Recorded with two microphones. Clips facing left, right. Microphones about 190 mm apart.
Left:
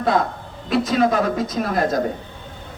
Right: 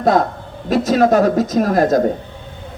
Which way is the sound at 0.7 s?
40° right (ahead or behind).